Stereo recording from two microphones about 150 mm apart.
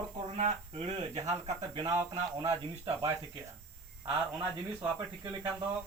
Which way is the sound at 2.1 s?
45° right (ahead or behind).